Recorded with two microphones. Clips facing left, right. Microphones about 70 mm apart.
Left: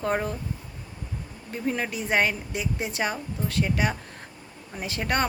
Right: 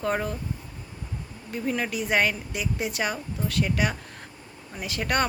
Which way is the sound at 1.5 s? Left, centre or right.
Left.